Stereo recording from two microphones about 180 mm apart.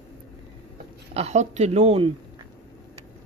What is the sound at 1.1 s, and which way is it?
Speech, 40° right (ahead or behind).